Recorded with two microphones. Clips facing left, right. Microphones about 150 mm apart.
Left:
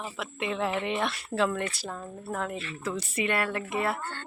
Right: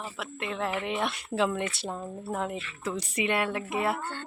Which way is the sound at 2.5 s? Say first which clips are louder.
Left 1 dB; 35° left (ahead or behind).